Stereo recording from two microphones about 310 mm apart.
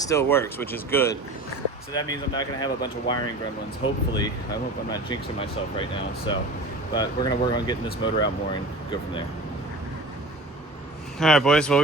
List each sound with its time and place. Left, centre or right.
0.1 s speech: centre
11.2 s speech: centre